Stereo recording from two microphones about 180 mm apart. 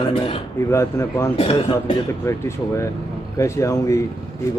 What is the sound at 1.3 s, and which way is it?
Speech, 30° left (ahead or behind).